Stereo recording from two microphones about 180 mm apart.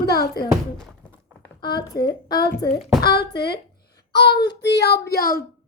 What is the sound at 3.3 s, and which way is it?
Speech, 65° left (ahead or behind).